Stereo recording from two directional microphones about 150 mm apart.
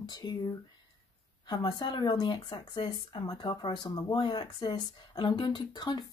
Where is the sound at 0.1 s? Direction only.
30° left (ahead or behind).